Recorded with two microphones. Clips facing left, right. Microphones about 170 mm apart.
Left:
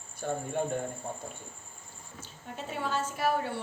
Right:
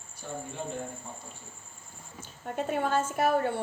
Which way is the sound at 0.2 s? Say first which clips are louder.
Left 6 dB; 55° left (ahead or behind).